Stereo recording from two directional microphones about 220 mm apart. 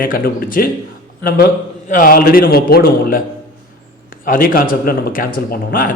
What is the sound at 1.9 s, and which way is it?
Speech, 40° left (ahead or behind).